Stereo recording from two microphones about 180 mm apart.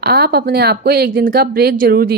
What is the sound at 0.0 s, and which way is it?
Speech, 55° right (ahead or behind).